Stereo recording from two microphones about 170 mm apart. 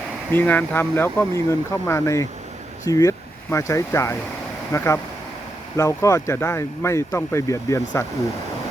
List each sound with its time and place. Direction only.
0.3 s speech: 10° left (ahead or behind)